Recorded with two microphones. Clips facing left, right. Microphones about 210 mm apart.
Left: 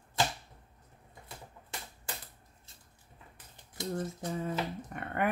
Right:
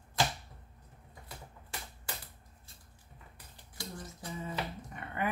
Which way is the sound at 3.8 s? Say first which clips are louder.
Left 8 dB; 20° left (ahead or behind).